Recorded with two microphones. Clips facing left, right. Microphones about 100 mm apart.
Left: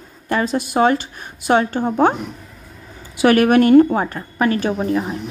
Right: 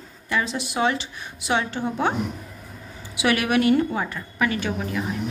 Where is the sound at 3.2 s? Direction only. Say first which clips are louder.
Left 8 dB; 45° left (ahead or behind).